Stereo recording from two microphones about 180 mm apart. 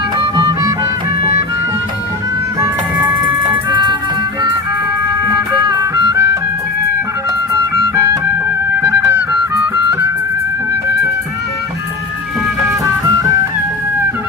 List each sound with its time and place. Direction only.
0.2 s music: 25° right (ahead or behind)
2.6 s music: 10° right (ahead or behind)
3.7 s music: 20° right (ahead or behind)
5.2 s music: 20° right (ahead or behind)
7.5 s music: 15° right (ahead or behind)